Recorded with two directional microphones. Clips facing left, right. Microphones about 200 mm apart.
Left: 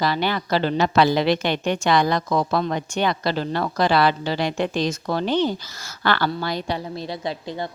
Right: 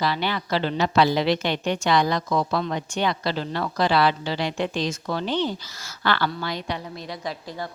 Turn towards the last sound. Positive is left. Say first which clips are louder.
# left 4 dB
turn(degrees=25)  # may be behind; listen again after turning